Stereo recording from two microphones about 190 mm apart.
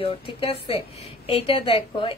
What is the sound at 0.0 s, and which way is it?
A woman's voice, 30° left (ahead or behind).